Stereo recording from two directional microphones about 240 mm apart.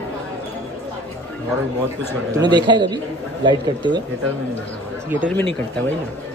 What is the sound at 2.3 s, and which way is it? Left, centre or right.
A man's voice, centre.